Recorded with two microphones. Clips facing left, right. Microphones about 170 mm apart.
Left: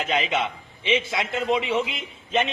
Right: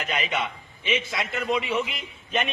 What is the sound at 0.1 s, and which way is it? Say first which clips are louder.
Speech: left 3 dB; 25° left (ahead or behind).